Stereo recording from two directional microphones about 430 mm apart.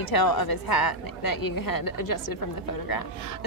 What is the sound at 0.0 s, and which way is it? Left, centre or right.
A woman's voice, left.